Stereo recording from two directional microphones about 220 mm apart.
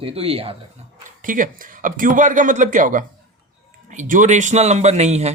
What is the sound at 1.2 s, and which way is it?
Speech, 35° right (ahead or behind).